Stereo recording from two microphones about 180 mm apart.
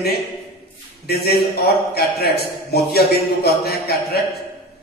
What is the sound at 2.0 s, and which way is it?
A man's voice, 60° left (ahead or behind).